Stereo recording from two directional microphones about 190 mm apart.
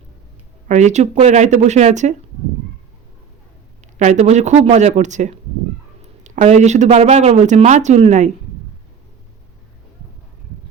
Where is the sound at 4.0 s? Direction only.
35° right (ahead or behind).